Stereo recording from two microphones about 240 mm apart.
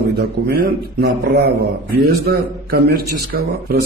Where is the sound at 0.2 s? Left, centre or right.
Right.